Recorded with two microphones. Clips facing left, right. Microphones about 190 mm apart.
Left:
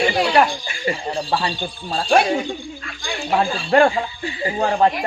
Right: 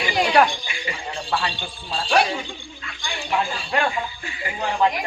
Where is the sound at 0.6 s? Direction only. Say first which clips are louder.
Left 7 dB; 40° left (ahead or behind).